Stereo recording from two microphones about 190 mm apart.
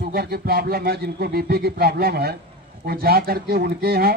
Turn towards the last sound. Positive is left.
turn(degrees=-55)  # may be behind; listen again after turning